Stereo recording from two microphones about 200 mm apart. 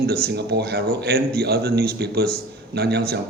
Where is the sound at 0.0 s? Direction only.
50° right (ahead or behind).